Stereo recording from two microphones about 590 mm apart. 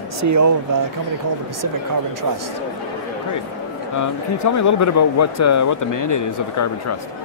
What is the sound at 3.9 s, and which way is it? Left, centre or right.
Speech, left.